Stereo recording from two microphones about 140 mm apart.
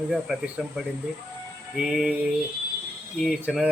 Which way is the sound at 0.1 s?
Centre (ahead or behind).